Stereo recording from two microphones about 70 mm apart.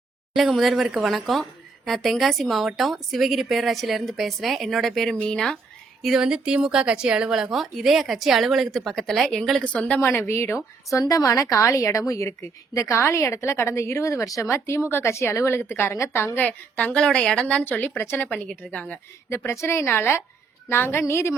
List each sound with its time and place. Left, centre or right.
0.3 s a woman's voice: centre
6.0 s a woman's voice: centre
9.6 s a woman's voice: centre
10.0 s a woman's voice: left
11.0 s a woman's voice: left
16.4 s a woman's voice: centre
17.4 s a woman's voice: left
17.9 s a woman's voice: left
18.3 s a woman's voice: centre
19.5 s a woman's voice: left